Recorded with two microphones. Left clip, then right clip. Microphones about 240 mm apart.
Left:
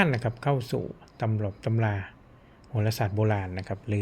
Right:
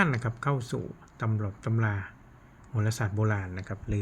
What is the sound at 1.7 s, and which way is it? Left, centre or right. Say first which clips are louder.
Speech: left 2 dB; right.